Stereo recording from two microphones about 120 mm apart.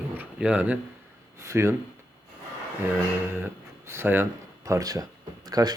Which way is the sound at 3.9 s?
20° right (ahead or behind).